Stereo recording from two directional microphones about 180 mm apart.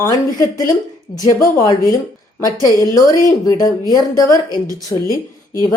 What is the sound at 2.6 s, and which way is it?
A woman's voice, 20° left (ahead or behind).